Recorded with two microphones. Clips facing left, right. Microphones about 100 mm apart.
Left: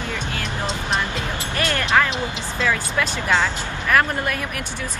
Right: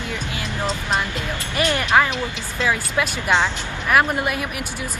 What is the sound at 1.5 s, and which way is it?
Speech, 15° right (ahead or behind).